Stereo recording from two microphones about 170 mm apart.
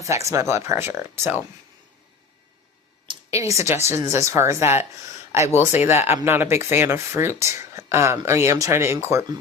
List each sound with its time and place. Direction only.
0.0 s speech: 15° right (ahead or behind)
3.2 s speech: 20° right (ahead or behind)